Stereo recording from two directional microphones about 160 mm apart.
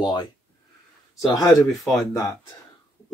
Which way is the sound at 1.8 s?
Centre (ahead or behind).